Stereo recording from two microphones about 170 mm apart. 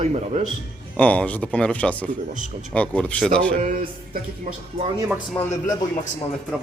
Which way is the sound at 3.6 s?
55° right (ahead or behind).